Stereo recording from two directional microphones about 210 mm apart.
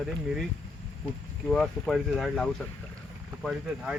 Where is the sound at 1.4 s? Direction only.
Centre (ahead or behind).